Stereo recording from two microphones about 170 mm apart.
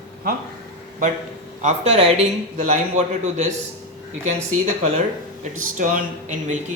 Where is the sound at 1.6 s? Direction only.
35° right (ahead or behind).